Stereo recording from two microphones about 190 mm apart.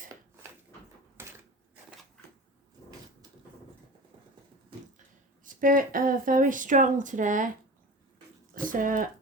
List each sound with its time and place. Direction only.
1.2 s a sound: 10° right (ahead or behind)
5.5 s speech: 45° right (ahead or behind)
8.6 s speech: 45° right (ahead or behind)